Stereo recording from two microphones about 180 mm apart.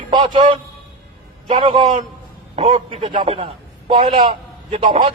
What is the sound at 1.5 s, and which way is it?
Speech, 25° right (ahead or behind).